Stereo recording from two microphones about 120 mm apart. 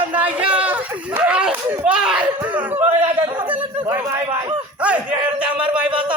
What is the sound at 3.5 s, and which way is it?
Speech, 20° right (ahead or behind).